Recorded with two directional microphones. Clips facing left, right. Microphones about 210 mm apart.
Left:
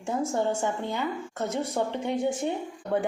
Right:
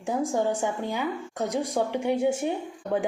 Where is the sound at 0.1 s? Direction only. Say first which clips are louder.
Right 1 dB; 15° right (ahead or behind).